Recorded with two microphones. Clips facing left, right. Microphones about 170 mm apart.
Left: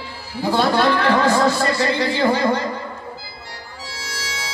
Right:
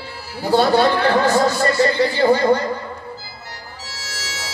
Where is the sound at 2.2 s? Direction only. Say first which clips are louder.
Right 4 dB; 40° right (ahead or behind).